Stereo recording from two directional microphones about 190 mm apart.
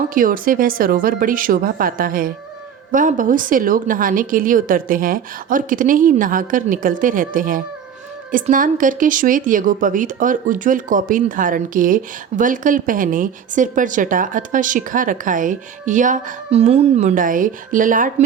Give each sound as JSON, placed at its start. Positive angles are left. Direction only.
{"t": 0.1, "sound": "a woman's voice", "side_deg": -45}